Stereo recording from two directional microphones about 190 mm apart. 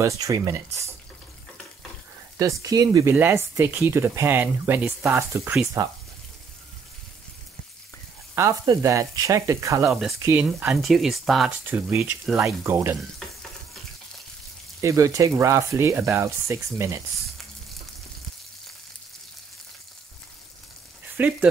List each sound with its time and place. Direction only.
0.0 s speech: 15° right (ahead or behind)
2.3 s speech: 15° right (ahead or behind)
8.8 s speech: 15° right (ahead or behind)
9.8 s speech: centre (ahead or behind)
11.6 s speech: 15° right (ahead or behind)
14.8 s speech: 15° right (ahead or behind)
21.2 s speech: 10° right (ahead or behind)